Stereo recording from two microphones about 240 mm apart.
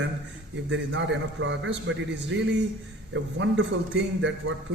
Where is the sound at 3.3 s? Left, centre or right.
Right.